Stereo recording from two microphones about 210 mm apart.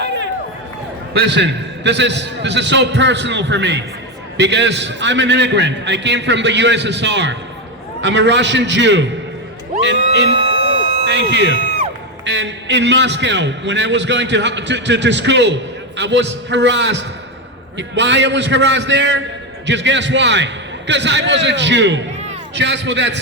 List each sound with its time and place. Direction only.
0.0 s run: 55° right (ahead or behind)
1.2 s a man's voice: 55° right (ahead or behind)